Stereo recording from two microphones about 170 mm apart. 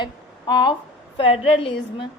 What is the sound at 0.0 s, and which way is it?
A woman's voice, 25° left (ahead or behind).